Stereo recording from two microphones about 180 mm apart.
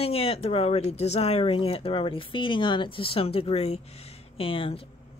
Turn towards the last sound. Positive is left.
turn(degrees=30)  # may be behind; listen again after turning